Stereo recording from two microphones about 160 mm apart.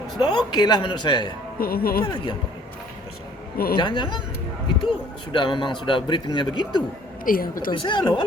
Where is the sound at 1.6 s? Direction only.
70° left (ahead or behind).